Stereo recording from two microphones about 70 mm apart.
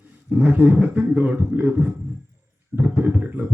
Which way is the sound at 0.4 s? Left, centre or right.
Right.